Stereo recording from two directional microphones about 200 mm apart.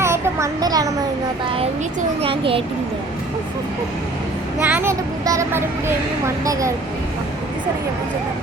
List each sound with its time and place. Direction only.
0.0 s a sound: 15° right (ahead or behind)
2.2 s a child's voice: 25° right (ahead or behind)
4.6 s a child's voice: 10° right (ahead or behind)